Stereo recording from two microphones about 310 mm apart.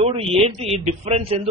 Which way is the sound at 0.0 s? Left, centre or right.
Centre.